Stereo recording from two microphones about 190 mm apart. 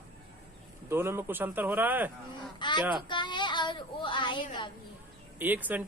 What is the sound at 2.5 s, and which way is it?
Speech, 25° left (ahead or behind).